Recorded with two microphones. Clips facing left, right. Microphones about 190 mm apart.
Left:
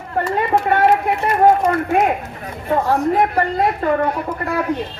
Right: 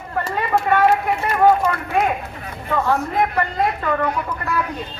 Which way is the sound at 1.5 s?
45° left (ahead or behind).